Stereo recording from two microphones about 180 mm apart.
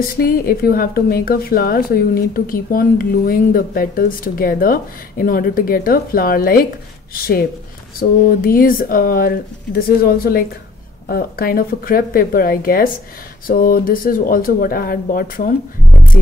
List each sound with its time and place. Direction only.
0.1 s speech: 55° left (ahead or behind)
8.0 s speech: 55° left (ahead or behind)